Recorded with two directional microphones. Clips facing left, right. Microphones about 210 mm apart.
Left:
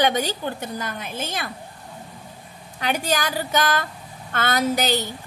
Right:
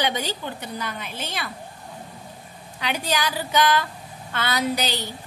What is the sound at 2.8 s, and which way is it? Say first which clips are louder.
A woman's voice: left 2 dB; 45° left (ahead or behind).